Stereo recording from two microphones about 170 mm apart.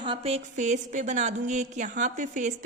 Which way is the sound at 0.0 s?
35° right (ahead or behind).